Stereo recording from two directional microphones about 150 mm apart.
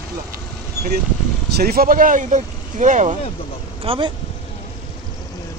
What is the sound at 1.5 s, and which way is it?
Speech, 80° right.